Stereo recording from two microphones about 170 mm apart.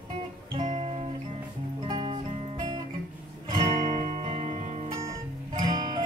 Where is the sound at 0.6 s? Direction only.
40° right (ahead or behind).